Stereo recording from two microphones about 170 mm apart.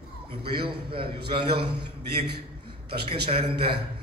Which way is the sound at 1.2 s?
70° right (ahead or behind).